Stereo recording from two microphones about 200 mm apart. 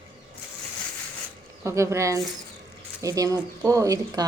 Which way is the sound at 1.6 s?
15° right (ahead or behind).